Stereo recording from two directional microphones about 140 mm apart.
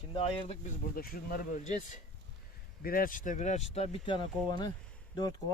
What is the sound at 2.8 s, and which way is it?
Speech, 90° left.